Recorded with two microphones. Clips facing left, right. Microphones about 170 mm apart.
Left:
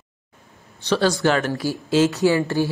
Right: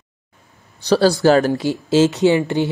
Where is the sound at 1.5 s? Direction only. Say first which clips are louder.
Right 4 dB; 25° right (ahead or behind).